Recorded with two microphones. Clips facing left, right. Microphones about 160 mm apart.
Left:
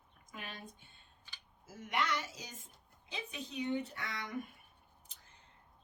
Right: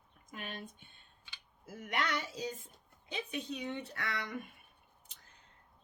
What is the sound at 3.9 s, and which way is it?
Speech, 75° right (ahead or behind).